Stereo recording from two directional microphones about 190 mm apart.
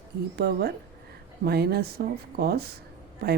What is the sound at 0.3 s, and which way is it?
Speech, 55° right (ahead or behind).